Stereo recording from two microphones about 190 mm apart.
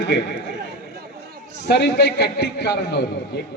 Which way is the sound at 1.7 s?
65° left (ahead or behind).